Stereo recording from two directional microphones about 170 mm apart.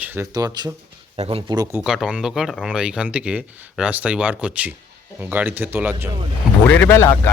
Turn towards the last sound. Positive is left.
turn(degrees=15)  # may be behind; listen again after turning